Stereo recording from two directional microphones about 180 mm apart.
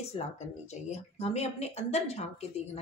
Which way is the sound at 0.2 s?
30° left (ahead or behind).